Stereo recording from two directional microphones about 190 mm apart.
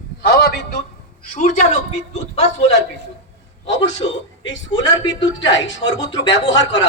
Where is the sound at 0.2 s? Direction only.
55° left (ahead or behind).